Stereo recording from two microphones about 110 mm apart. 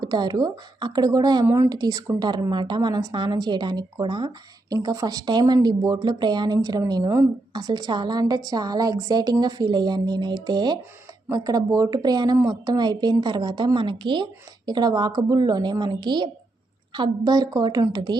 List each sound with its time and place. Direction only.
0.0 s speech: 40° right (ahead or behind)
1.5 s speech: 20° right (ahead or behind)
1.7 s speech: 35° right (ahead or behind)